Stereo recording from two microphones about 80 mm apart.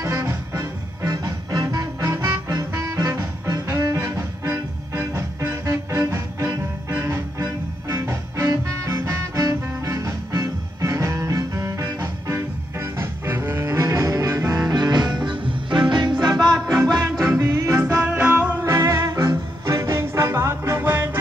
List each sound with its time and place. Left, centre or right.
0.0 s music: right
3.6 s music: right
14.7 s music: right
15.2 s music: right
17.4 s music: right
18.0 s music: centre
18.6 s music: right